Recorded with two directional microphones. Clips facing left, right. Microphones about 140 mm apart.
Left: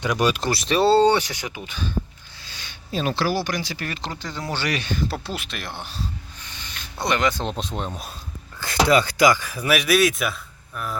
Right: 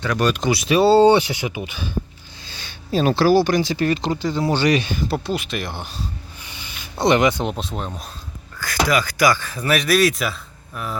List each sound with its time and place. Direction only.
0.0 s speech: 10° left (ahead or behind)
0.4 s speech: centre (ahead or behind)
2.4 s speech: 30° right (ahead or behind); by 5.0 s 15° right (ahead or behind)
5.0 s speech: centre (ahead or behind)
6.4 s a sound: 10° right (ahead or behind)
7.0 s speech: 20° right (ahead or behind)
7.5 s speech: centre (ahead or behind)
8.5 s speech: 25° left (ahead or behind); by 10.9 s centre (ahead or behind)